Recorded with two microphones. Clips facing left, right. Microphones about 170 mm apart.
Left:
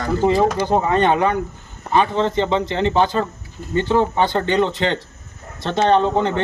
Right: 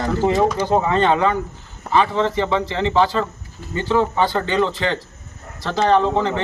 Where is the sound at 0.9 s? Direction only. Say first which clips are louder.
Left 1 dB; 15° left (ahead or behind).